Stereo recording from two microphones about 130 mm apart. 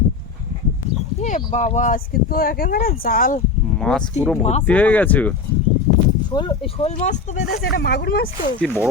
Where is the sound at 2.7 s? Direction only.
90° left.